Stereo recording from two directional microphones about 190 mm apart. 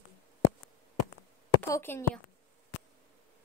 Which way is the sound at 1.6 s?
15° left (ahead or behind).